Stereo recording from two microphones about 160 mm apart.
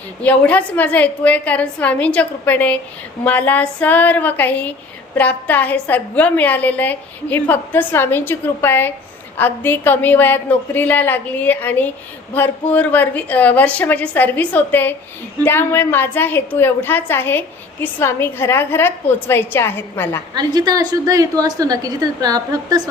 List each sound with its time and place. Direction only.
0.2 s a woman's voice: 10° left (ahead or behind)
20.3 s a woman's voice: 25° right (ahead or behind)